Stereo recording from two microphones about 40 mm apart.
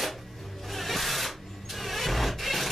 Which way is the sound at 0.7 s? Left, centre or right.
Centre.